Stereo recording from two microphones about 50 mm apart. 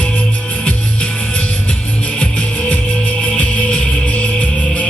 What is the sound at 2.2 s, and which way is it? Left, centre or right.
Music, left.